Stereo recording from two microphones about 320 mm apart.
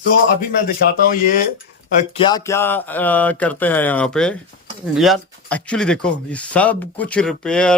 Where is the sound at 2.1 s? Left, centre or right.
Centre.